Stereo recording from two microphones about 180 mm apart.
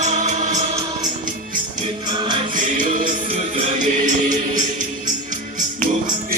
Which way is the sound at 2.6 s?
45° right (ahead or behind).